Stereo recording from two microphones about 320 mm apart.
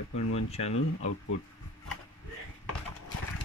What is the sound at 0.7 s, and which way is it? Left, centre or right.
Speech, left.